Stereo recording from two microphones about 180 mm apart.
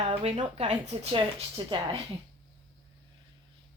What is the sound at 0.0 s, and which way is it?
Speech, 35° right (ahead or behind).